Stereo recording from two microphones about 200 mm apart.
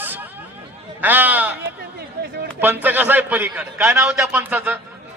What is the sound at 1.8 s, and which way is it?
Chatter, 50° right (ahead or behind).